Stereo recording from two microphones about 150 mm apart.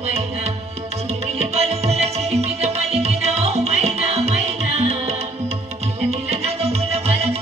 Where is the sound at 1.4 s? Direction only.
45° right (ahead or behind).